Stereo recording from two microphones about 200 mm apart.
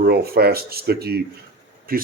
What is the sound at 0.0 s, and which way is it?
Speech, 50° right (ahead or behind).